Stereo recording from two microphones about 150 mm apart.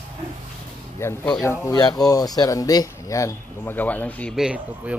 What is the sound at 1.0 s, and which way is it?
A man's voice, 15° left (ahead or behind).